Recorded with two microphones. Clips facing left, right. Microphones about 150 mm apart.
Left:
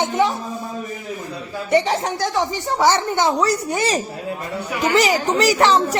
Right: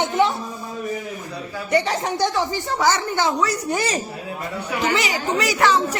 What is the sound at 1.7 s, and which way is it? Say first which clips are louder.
Speech: left 3 dB; 25° left (ahead or behind).